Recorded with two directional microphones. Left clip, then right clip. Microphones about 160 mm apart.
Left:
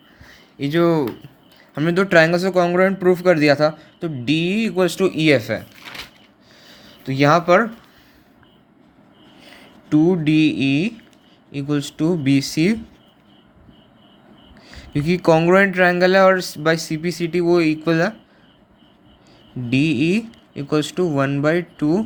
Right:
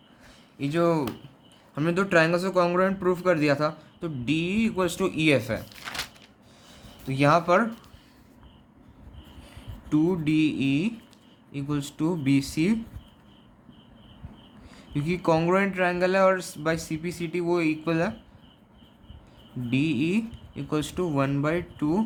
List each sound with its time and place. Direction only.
0.3 s a sound: 20° left (ahead or behind)
1.7 s speech: 25° left (ahead or behind)
6.7 s speech: 20° left (ahead or behind)
9.4 s speech: 20° left (ahead or behind)
14.7 s speech: 30° left (ahead or behind)
19.7 s speech: 25° left (ahead or behind)